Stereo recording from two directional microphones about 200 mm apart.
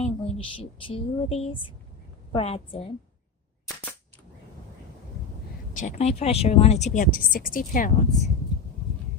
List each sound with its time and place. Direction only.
0.0 s a woman's voice: 30° left (ahead or behind)
5.7 s speech: 35° left (ahead or behind)